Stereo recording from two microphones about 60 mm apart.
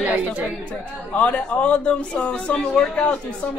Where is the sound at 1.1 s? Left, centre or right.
Left.